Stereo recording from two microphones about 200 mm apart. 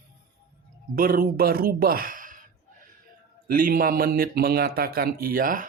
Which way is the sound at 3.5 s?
45° right (ahead or behind).